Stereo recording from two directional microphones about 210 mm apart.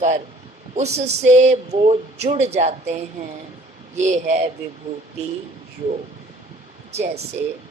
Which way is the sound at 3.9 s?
35° right (ahead or behind).